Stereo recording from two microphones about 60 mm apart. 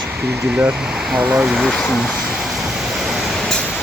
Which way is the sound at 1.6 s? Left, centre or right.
Centre.